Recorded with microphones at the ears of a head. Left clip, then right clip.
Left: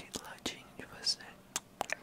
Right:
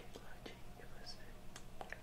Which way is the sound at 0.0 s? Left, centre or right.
Left.